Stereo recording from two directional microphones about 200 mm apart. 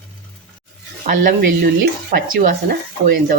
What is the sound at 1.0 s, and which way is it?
Speech, 40° right (ahead or behind).